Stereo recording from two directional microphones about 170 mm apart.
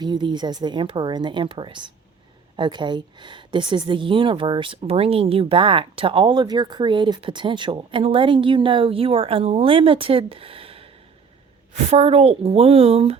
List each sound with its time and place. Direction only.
0.0 s a woman's voice: 25° right (ahead or behind)